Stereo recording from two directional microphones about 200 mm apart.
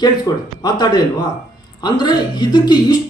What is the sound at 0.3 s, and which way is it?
Speech, 20° left (ahead or behind).